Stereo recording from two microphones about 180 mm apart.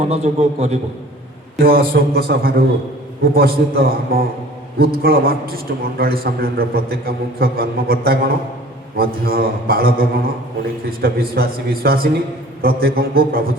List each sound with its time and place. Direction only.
0.1 s a man's voice: 35° right (ahead or behind)
1.5 s a man's voice: 55° right (ahead or behind)